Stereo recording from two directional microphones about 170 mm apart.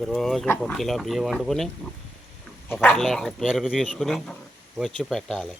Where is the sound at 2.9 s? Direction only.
Centre (ahead or behind).